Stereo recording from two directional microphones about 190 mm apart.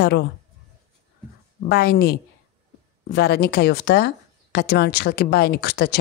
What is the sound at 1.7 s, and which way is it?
Speech, 55° left (ahead or behind).